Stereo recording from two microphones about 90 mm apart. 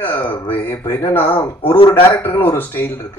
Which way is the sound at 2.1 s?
20° left (ahead or behind).